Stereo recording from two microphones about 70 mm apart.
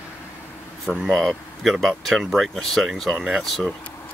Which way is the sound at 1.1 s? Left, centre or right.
Centre.